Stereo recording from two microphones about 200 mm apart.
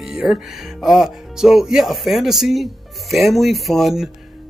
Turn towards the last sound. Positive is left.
turn(degrees=0)  # may be behind; listen again after turning